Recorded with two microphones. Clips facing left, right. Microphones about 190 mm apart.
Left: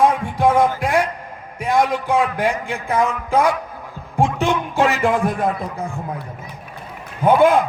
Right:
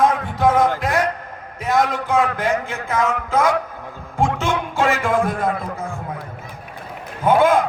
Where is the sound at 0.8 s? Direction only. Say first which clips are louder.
Left 2 dB; 15° left (ahead or behind).